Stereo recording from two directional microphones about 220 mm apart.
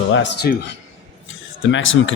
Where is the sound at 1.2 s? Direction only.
55° left (ahead or behind).